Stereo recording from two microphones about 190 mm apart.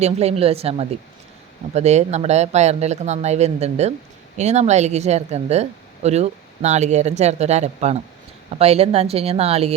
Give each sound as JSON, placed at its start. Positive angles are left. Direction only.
{"t": 0.0, "sound": "speech", "side_deg": -35}